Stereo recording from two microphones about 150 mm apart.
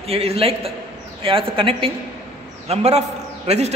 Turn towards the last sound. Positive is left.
turn(degrees=-45)  # may be behind; listen again after turning